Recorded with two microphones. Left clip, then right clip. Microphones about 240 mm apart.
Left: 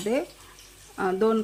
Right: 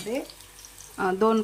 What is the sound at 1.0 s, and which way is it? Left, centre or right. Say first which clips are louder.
Speech: right 1 dB; centre.